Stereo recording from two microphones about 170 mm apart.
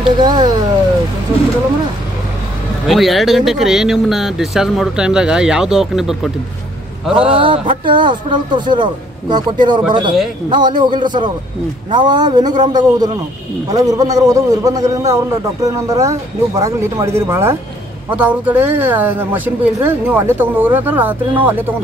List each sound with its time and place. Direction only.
0.2 s speech: 25° right (ahead or behind)
2.9 s speech: centre (ahead or behind)
7.3 s speech: 30° right (ahead or behind); by 21.6 s 10° right (ahead or behind)